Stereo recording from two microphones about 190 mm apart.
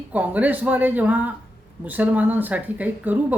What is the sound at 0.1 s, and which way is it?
Speech, 5° right (ahead or behind).